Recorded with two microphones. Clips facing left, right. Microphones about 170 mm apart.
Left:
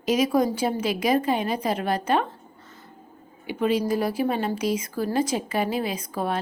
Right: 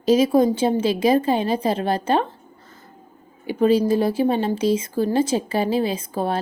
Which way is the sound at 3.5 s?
35° right (ahead or behind).